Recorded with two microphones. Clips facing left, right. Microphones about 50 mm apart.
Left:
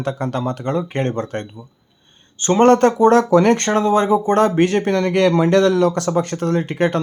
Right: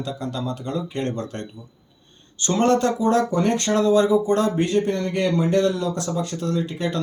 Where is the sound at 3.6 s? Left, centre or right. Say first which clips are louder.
Left 2 dB; left.